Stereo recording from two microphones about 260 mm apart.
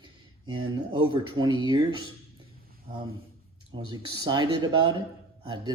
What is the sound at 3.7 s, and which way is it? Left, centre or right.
Speech, centre.